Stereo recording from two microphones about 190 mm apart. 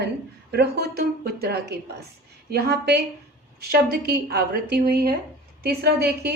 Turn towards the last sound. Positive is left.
turn(degrees=-55)  # may be behind; listen again after turning